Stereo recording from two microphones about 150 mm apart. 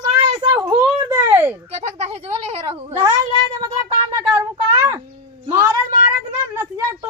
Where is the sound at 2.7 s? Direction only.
35° right (ahead or behind).